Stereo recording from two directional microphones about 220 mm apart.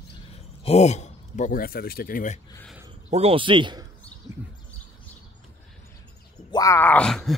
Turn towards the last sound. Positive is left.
turn(degrees=5)  # may be behind; listen again after turning